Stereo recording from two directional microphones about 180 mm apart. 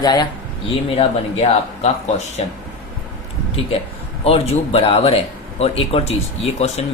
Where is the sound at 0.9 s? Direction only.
35° left (ahead or behind).